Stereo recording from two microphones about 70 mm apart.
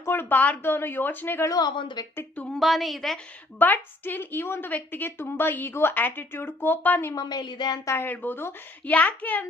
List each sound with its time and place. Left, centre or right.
0.0 s a woman's voice: left
1.5 s a woman's voice: left
2.5 s a woman's voice: centre
3.6 s a woman's voice: left
7.1 s a woman's voice: left
8.0 s a woman's voice: left